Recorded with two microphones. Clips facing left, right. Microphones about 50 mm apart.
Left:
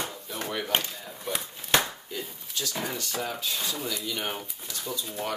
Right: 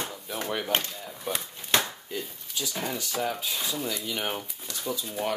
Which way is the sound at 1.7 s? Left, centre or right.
Centre.